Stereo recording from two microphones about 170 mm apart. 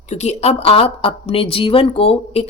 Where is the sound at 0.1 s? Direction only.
40° left (ahead or behind).